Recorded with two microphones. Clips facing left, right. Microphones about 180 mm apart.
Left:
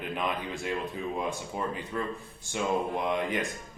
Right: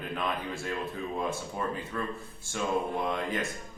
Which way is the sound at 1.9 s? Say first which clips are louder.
Left 1 dB; 20° left (ahead or behind).